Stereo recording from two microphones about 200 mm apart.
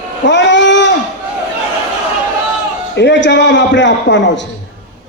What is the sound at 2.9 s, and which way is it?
A man's voice, 60° left (ahead or behind).